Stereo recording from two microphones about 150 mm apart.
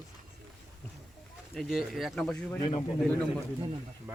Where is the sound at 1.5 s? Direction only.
Centre (ahead or behind).